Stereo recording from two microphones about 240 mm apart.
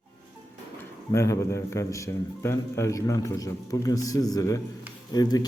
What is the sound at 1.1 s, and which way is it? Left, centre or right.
A man's voice, centre.